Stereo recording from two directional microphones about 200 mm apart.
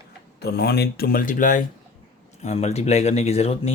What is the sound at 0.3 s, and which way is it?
Speech, 55° left (ahead or behind).